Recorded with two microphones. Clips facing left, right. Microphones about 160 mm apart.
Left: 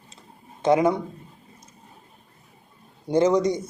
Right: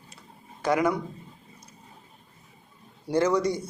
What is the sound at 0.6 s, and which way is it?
Speech, 25° left (ahead or behind).